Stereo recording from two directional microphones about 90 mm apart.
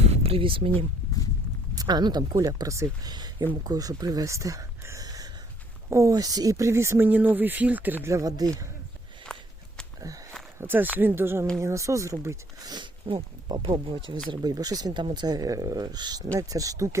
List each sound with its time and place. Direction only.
0.2 s speech: 90° right
1.7 s speech: 45° right (ahead or behind)
5.0 s gasp: 45° right (ahead or behind)
5.9 s speech: 35° right (ahead or behind); by 8.1 s 20° right (ahead or behind)
8.1 s speech: 40° right (ahead or behind)
9.2 s walk: 10° left (ahead or behind)
10.6 s speech: 25° right (ahead or behind)
12.6 s speech: 55° right (ahead or behind)
14.3 s speech: 45° right (ahead or behind)
16.3 s speech: 35° right (ahead or behind)